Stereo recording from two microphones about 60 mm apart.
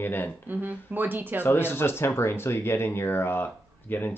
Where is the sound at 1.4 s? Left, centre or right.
Left.